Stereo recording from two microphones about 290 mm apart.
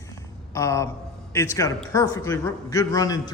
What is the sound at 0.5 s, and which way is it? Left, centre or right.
A man's voice, centre.